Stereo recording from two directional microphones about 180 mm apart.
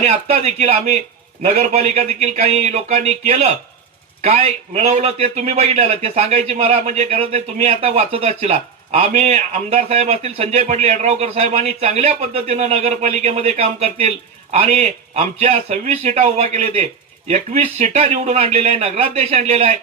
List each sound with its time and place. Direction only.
0.0 s a man's voice: 35° right (ahead or behind)